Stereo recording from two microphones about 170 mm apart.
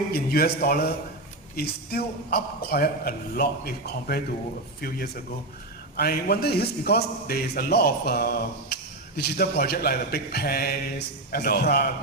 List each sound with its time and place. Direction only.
0.1 s a man's voice: 65° left (ahead or behind)